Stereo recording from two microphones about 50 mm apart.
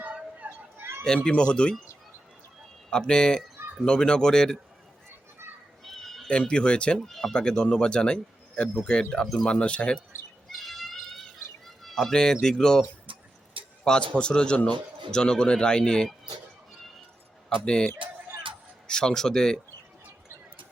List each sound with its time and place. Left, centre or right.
0.0 s a sound: right
0.8 s a sound: right
1.0 s speech: centre
2.9 s speech: centre
5.8 s a sound: centre
6.5 s speech: centre
7.0 s speech: centre
7.3 s speech: centre
9.2 s speech: centre
9.5 s speech: left
10.6 s a sound: centre
11.8 s speech: centre
13.9 s speech: centre
17.7 s speech: centre